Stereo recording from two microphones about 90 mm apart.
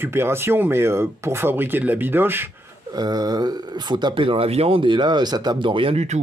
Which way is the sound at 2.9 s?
50° right (ahead or behind).